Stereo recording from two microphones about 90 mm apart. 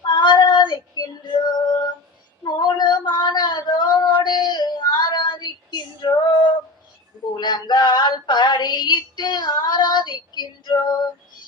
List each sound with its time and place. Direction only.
0.1 s female singing: 60° left (ahead or behind)
2.4 s a sound: 55° left (ahead or behind)
7.3 s female singing: 55° left (ahead or behind)